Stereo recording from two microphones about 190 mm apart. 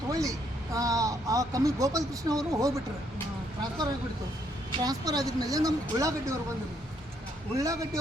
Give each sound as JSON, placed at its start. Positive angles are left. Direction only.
{"t": 0.1, "sound": "a sound", "side_deg": -15}
{"t": 4.8, "sound": "a woman's voice", "side_deg": -20}
{"t": 7.5, "sound": "a man's voice", "side_deg": -20}